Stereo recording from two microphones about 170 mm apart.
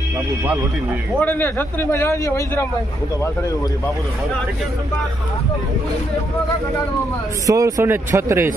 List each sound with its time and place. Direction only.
1.2 s a man's voice: 10° left (ahead or behind)
7.4 s speech: 20° right (ahead or behind)